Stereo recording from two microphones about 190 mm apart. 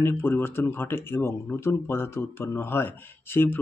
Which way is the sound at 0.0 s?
10° left (ahead or behind).